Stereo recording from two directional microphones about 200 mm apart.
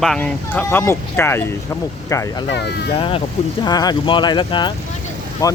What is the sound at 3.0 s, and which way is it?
Speech, 25° left (ahead or behind).